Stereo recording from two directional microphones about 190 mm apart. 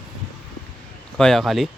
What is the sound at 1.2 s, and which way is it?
Speech, centre (ahead or behind).